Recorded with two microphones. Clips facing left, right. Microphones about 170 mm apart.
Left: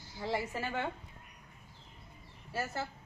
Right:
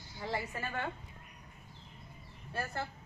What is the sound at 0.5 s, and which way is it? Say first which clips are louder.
Speech: left 3 dB; 25° left (ahead or behind).